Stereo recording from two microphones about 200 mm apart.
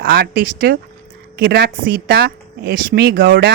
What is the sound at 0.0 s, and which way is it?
Speech, 50° right (ahead or behind).